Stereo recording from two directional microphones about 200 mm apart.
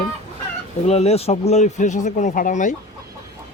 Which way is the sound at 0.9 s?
30° left (ahead or behind).